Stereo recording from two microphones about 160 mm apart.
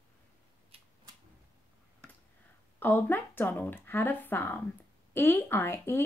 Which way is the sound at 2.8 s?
10° left (ahead or behind).